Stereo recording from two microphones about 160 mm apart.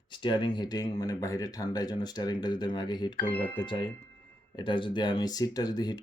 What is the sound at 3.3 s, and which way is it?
Speech, 10° left (ahead or behind).